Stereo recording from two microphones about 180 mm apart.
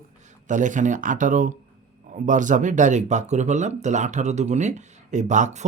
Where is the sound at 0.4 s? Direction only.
45° right (ahead or behind).